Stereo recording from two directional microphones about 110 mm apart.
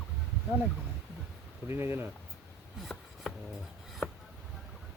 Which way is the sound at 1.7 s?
20° right (ahead or behind).